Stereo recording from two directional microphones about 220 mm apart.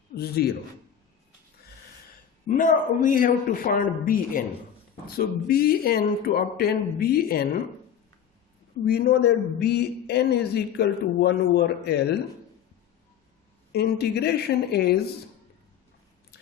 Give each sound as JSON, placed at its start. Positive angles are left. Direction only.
{"t": 0.2, "sound": "a man's voice", "side_deg": 45}
{"t": 2.5, "sound": "a man's voice", "side_deg": 35}
{"t": 8.9, "sound": "a man's voice", "side_deg": 45}
{"t": 13.7, "sound": "a man's voice", "side_deg": 50}